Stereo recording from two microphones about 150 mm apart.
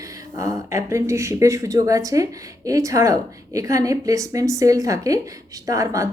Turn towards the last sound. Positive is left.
turn(degrees=-20)  # may be behind; listen again after turning